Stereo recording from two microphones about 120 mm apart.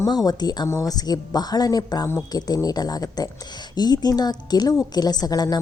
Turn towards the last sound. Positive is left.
turn(degrees=30)  # may be behind; listen again after turning